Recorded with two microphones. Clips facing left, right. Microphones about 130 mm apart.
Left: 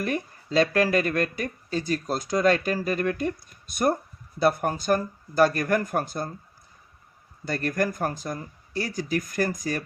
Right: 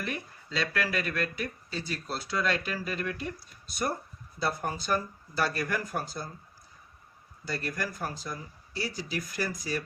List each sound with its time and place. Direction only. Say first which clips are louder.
0.0 s speech: left 8 dB; 45° left (ahead or behind)
7.4 s speech: left 8 dB; 55° left (ahead or behind)